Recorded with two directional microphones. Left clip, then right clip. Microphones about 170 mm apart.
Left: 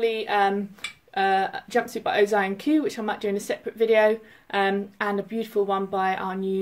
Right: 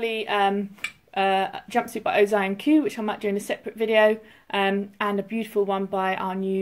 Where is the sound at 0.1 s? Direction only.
10° left (ahead or behind).